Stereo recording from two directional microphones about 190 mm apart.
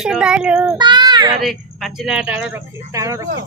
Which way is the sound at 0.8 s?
25° right (ahead or behind).